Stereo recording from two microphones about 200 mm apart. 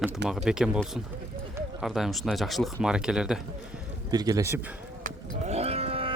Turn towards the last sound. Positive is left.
turn(degrees=-30)  # may be behind; listen again after turning